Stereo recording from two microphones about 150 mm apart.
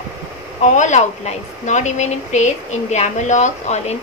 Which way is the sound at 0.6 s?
55° left (ahead or behind).